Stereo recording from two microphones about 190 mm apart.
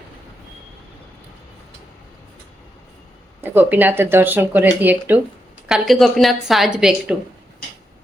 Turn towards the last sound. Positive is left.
turn(degrees=-5)  # may be behind; listen again after turning